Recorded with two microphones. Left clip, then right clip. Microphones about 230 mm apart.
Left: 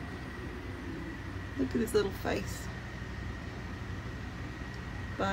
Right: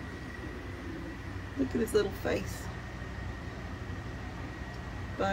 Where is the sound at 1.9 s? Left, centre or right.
Centre.